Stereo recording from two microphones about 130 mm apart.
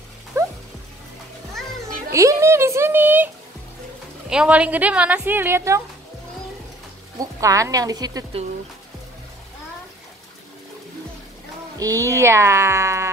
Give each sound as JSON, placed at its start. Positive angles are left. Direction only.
{"t": 0.3, "sound": "dog", "side_deg": -20}
{"t": 2.1, "sound": "speech", "side_deg": -20}
{"t": 4.3, "sound": "a woman's voice", "side_deg": -10}
{"t": 7.2, "sound": "speech", "side_deg": -25}
{"t": 11.8, "sound": "speech", "side_deg": -25}